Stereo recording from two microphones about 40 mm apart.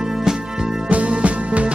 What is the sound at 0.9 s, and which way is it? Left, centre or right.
Music, right.